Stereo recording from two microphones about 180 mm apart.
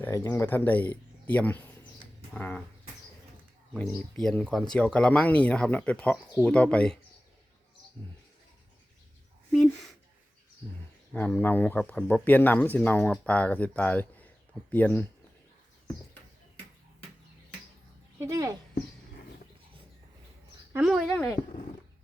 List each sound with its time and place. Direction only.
0.0 s speech: 15° left (ahead or behind)
3.8 s speech: 5° left (ahead or behind)
9.5 s speech: centre (ahead or behind)
11.1 s speech: 10° left (ahead or behind)
18.2 s speech: 20° right (ahead or behind)
20.7 s speech: 5° right (ahead or behind)